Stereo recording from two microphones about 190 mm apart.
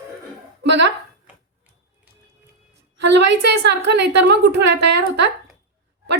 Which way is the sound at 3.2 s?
65° right (ahead or behind).